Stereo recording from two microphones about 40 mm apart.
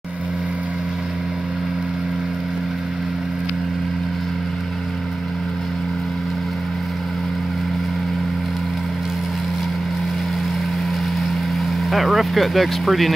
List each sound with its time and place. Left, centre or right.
11.9 s speech: centre